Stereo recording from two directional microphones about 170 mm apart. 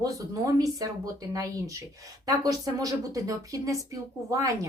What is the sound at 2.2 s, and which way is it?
Speech, 20° right (ahead or behind).